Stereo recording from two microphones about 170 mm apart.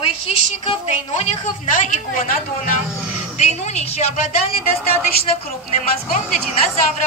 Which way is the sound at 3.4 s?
40° left (ahead or behind).